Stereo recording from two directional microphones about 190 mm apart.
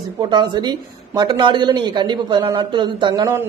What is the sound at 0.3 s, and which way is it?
A woman's voice, 25° right (ahead or behind).